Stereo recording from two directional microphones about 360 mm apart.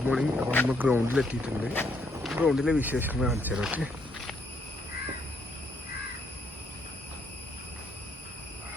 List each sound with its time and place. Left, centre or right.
0.0 s speech: centre